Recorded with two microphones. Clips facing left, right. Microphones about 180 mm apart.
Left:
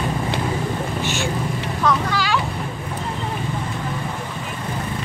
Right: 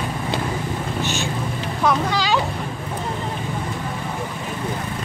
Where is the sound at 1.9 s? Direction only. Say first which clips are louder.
Right 1 dB; 20° right (ahead or behind).